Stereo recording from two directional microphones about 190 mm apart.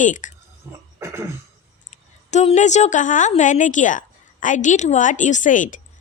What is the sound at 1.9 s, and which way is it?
A woman's voice, 35° left (ahead or behind).